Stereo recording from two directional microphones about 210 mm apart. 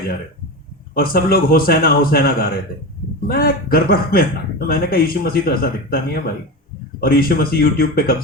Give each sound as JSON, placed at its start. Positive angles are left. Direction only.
{"t": 0.9, "sound": "a man's voice", "side_deg": 45}